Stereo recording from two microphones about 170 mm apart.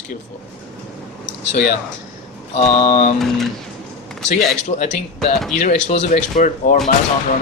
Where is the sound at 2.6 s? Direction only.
45° left (ahead or behind).